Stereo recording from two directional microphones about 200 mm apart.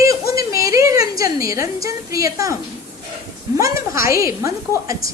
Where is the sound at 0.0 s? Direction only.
15° right (ahead or behind).